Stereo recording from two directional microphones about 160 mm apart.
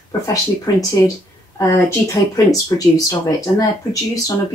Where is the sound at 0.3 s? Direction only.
20° left (ahead or behind).